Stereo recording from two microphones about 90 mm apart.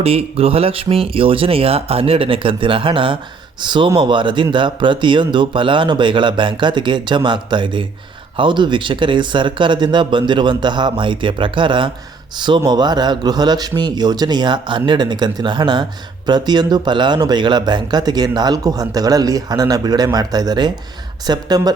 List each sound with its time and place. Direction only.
0.0 s speech: 90° right; by 3.2 s 75° right (ahead or behind)
3.6 s speech: 60° right (ahead or behind)